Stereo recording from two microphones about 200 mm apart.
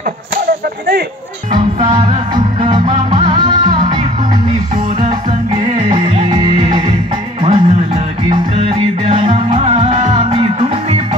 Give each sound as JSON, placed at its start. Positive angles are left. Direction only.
{"t": 2.0, "sound": "music", "side_deg": -20}
{"t": 5.0, "sound": "music", "side_deg": -30}
{"t": 7.4, "sound": "music", "side_deg": -30}